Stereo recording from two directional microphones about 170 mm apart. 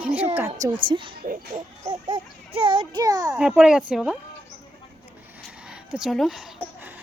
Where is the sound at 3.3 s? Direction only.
5° right (ahead or behind).